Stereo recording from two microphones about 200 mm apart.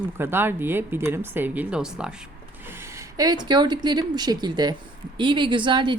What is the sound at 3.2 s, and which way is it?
A woman's voice, 20° right (ahead or behind).